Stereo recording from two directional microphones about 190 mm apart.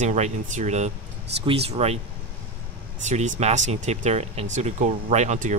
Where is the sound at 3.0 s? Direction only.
40° right (ahead or behind).